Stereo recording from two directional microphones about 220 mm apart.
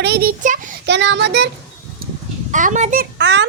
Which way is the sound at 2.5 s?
35° right (ahead or behind).